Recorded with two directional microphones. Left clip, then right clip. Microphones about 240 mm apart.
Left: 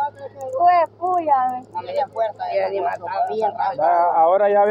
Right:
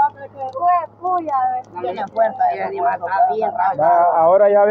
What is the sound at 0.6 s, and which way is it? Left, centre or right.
Speech, left.